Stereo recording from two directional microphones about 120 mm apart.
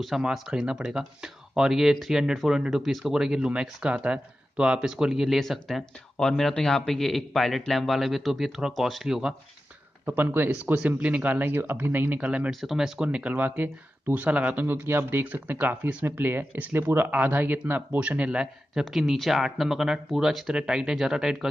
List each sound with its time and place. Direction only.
0.0 s speech: 5° right (ahead or behind)
10.0 s speech: 15° right (ahead or behind)
12.4 s speech: centre (ahead or behind)